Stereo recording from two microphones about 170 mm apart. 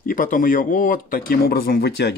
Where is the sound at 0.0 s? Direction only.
55° left (ahead or behind).